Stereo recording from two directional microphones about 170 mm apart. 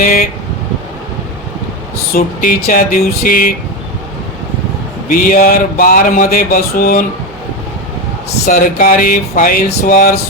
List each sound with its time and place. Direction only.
0.0 s mantra: 55° left (ahead or behind)
2.1 s mantra: 55° left (ahead or behind)
5.1 s mantra: 55° left (ahead or behind)
8.4 s mantra: 55° left (ahead or behind)